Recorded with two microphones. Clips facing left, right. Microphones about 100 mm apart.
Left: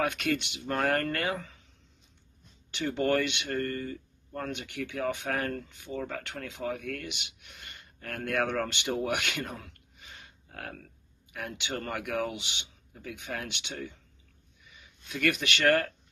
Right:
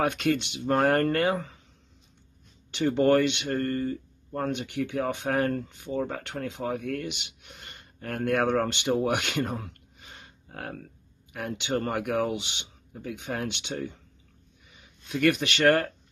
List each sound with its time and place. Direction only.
0.0 s speech: 30° right (ahead or behind)
2.7 s speech: 35° right (ahead or behind)
15.0 s speech: 35° right (ahead or behind)